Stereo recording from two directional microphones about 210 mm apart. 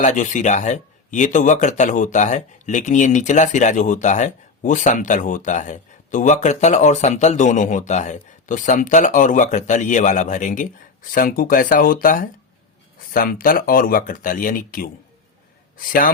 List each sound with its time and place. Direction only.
0.0 s speech: 35° left (ahead or behind)
15.9 s speech: 45° left (ahead or behind)